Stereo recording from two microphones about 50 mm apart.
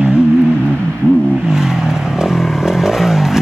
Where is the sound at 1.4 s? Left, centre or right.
Centre.